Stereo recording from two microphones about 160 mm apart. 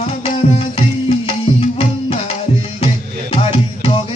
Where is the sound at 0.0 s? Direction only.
40° left (ahead or behind).